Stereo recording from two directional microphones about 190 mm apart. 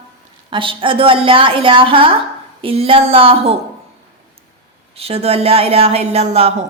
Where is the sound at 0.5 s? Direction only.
25° right (ahead or behind).